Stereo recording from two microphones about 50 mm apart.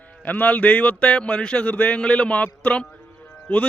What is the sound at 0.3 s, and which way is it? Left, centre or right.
Speech, left.